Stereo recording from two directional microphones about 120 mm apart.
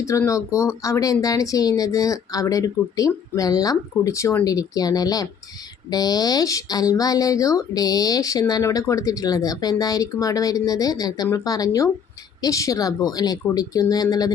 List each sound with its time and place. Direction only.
0.0 s speech: 25° left (ahead or behind)